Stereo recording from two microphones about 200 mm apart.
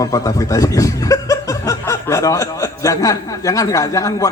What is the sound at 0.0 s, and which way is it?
Speech, 15° left (ahead or behind).